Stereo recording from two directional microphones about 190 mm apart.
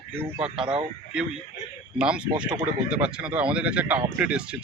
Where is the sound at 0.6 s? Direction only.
25° right (ahead or behind).